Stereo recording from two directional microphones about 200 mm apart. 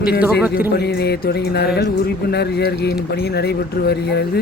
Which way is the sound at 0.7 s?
55° left (ahead or behind).